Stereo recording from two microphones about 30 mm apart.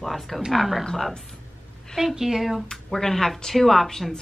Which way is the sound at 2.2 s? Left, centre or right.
Centre.